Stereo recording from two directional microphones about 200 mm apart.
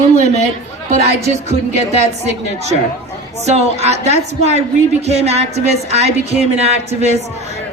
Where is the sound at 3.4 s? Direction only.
35° right (ahead or behind).